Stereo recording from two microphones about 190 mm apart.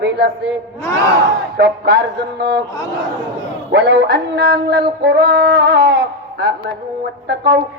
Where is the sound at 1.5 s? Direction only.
55° right (ahead or behind).